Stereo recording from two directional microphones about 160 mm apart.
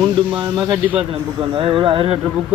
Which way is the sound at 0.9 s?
35° right (ahead or behind).